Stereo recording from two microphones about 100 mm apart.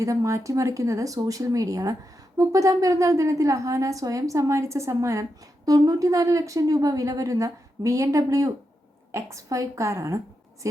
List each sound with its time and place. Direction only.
0.0 s a woman's voice: 30° right (ahead or behind)